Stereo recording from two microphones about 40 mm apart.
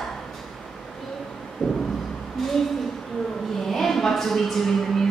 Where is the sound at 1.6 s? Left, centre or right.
Centre.